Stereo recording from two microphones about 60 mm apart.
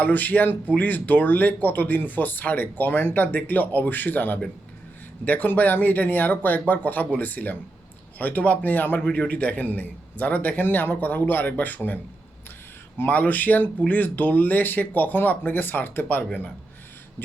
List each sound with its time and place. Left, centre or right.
0.0 s speech: left
9.0 s a man's voice: centre
9.3 s speech: left
13.0 s speech: left